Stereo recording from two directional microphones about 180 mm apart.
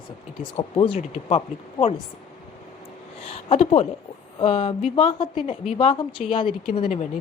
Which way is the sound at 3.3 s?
35° left (ahead or behind).